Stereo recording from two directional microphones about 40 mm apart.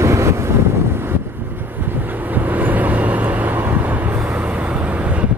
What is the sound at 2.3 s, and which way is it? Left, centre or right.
Vehicle, right.